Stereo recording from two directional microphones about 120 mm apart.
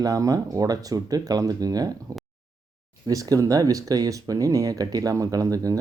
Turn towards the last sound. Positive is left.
turn(degrees=-30)  # may be behind; listen again after turning